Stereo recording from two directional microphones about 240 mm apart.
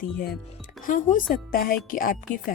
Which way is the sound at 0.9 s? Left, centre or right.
Left.